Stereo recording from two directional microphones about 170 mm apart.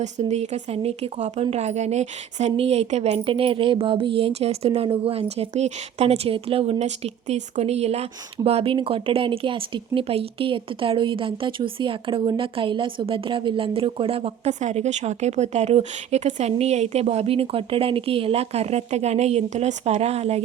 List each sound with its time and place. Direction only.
0.0 s a woman's voice: 40° right (ahead or behind)